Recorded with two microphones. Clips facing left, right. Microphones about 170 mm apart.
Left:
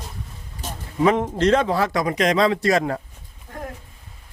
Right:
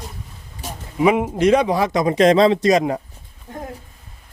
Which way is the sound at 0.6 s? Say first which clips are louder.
Right 2 dB; 10° right (ahead or behind).